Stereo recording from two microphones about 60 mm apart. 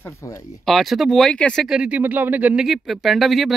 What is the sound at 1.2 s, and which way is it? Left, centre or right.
Speech, centre.